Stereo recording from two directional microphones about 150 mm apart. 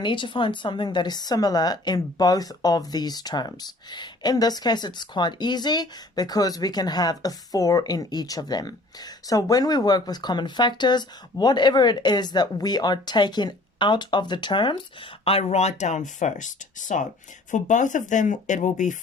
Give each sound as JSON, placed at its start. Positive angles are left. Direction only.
{"t": 0.0, "sound": "a woman's voice", "side_deg": 35}
{"t": 15.2, "sound": "speech", "side_deg": 40}